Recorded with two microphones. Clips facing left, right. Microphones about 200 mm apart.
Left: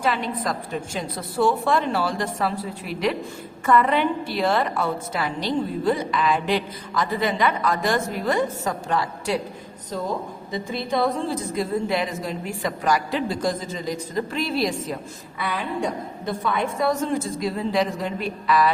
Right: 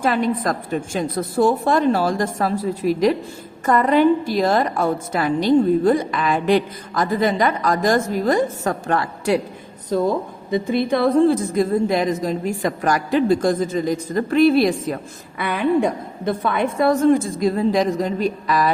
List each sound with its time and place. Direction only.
0.0 s a woman's voice: 45° right (ahead or behind)
10.5 s a woman's voice: 60° right (ahead or behind); by 18.7 s 40° right (ahead or behind)